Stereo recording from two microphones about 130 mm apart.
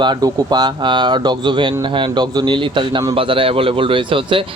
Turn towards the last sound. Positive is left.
turn(degrees=-40)  # may be behind; listen again after turning